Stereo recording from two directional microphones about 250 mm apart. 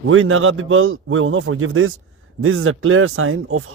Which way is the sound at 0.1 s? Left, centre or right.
Right.